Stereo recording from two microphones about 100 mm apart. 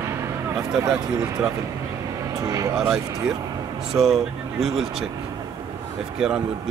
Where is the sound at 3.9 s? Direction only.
5° right (ahead or behind).